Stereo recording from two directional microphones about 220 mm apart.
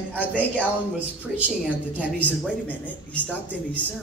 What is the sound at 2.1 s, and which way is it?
Speech, 5° left (ahead or behind).